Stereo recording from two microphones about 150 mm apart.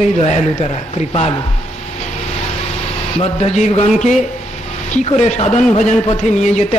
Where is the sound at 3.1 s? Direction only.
45° left (ahead or behind).